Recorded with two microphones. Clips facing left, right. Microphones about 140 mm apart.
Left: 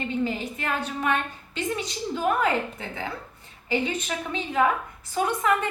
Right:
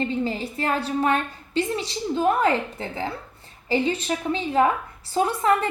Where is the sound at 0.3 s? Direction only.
35° right (ahead or behind).